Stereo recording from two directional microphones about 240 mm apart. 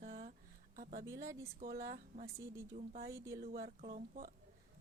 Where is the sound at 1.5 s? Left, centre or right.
Right.